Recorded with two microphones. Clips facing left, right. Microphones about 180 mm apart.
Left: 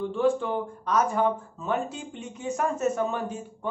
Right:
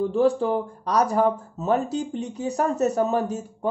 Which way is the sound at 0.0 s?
40° right (ahead or behind).